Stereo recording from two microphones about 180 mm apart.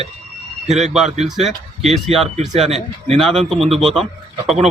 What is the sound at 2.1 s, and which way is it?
Speech, 35° right (ahead or behind).